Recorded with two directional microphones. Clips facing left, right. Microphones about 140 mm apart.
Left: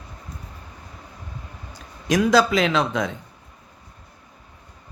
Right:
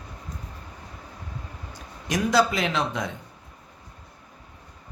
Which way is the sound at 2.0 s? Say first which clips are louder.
Left 4 dB; 90° left.